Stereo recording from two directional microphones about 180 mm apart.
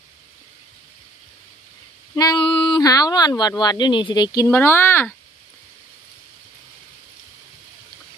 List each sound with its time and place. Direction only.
2.1 s speech: 25° left (ahead or behind)